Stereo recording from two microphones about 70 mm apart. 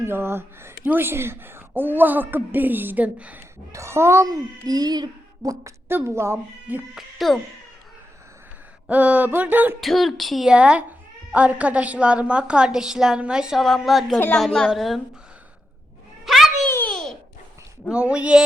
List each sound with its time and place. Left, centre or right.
0.0 s a woman's voice: right
3.7 s speech: right
4.3 s a child's voice: right
6.1 s speech: right
6.9 s speech: centre
8.9 s a woman's voice: right
9.8 s speech: centre
10.5 s a woman's voice: centre
13.7 s a woman's voice: centre
16.2 s a sound: centre
16.6 s babbling: left
16.9 s babbling: centre
17.9 s a woman's voice: centre